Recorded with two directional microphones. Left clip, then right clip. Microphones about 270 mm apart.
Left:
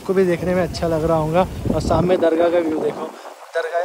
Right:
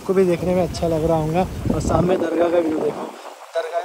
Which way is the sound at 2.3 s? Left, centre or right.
Centre.